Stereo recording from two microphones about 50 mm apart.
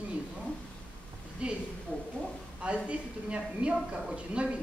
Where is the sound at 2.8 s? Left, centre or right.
Right.